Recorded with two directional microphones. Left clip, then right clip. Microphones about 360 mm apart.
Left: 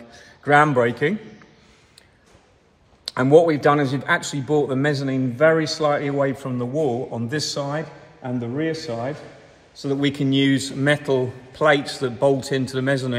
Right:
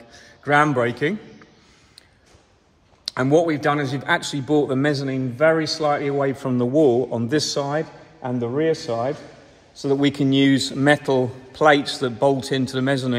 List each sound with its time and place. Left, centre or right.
0.1 s a man's voice: centre
3.1 s speech: centre
6.5 s a man's voice: right